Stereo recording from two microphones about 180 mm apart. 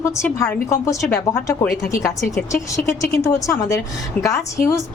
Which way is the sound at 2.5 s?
15° left (ahead or behind).